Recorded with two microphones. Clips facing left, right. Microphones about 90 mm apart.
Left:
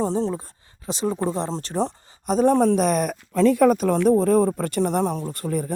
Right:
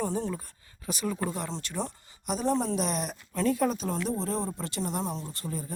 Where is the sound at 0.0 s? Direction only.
30° left (ahead or behind).